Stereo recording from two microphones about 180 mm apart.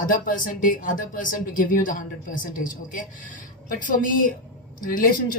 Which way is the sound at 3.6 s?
45° left (ahead or behind).